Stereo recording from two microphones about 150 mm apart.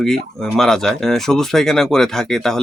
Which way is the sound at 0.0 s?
Centre (ahead or behind).